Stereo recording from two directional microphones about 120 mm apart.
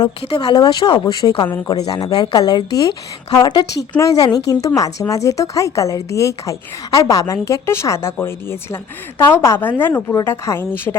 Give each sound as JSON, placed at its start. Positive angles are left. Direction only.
{"t": 0.2, "sound": "a woman's voice", "side_deg": 45}